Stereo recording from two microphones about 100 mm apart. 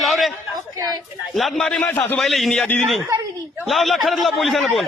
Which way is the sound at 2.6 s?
15° left (ahead or behind).